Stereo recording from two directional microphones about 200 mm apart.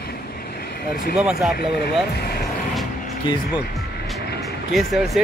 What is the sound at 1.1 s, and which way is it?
Speech, 5° right (ahead or behind).